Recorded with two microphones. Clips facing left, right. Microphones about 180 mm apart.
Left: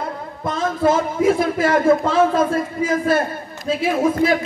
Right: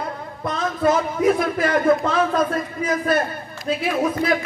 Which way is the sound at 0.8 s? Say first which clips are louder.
Left 1 dB; 25° left (ahead or behind).